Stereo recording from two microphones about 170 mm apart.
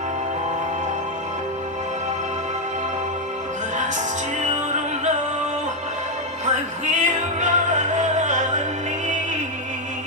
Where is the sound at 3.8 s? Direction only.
45° right (ahead or behind).